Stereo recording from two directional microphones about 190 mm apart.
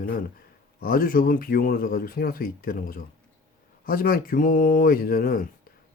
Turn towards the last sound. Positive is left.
turn(degrees=45)  # may be behind; listen again after turning